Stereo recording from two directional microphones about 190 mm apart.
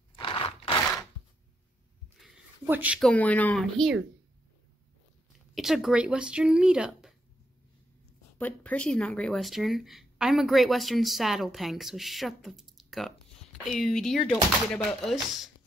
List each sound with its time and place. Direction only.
0.1 s a sound: 25° left (ahead or behind)
2.7 s speech: 5° right (ahead or behind)
3.1 s speech: 10° left (ahead or behind)
5.5 s speech: centre (ahead or behind)
8.4 s speech: 10° left (ahead or behind)